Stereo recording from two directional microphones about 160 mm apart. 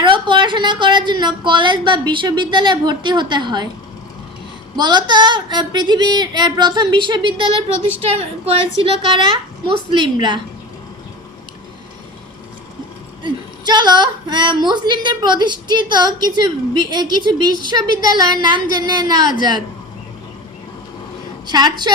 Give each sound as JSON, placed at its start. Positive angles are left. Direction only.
{"t": 0.0, "sound": "a woman's voice", "side_deg": -30}
{"t": 4.8, "sound": "a woman's voice", "side_deg": -25}
{"t": 13.2, "sound": "a woman's voice", "side_deg": -25}
{"t": 21.4, "sound": "a woman's voice", "side_deg": -25}